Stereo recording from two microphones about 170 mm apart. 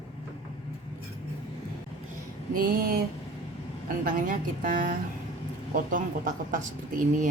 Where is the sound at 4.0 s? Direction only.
55° right (ahead or behind).